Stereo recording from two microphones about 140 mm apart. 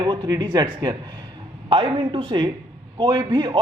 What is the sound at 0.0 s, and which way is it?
A man's voice, 30° right (ahead or behind).